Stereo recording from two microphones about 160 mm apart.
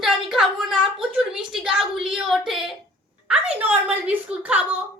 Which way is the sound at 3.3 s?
10° right (ahead or behind).